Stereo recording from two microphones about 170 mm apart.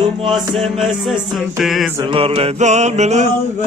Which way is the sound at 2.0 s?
35° right (ahead or behind).